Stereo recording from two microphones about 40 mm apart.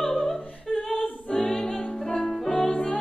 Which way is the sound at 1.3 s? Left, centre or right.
Centre.